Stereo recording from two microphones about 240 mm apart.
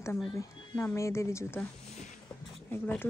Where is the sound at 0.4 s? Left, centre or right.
Centre.